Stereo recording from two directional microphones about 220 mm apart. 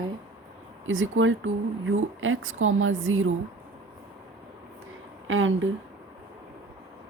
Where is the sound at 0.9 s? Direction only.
65° right (ahead or behind).